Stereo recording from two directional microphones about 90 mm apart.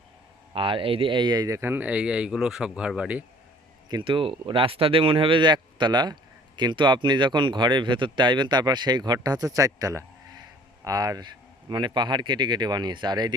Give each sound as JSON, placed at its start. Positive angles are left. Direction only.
{"t": 0.5, "sound": "speech", "side_deg": -75}
{"t": 1.5, "sound": "speech", "side_deg": -25}
{"t": 4.0, "sound": "speech", "side_deg": -85}
{"t": 11.7, "sound": "speech", "side_deg": -60}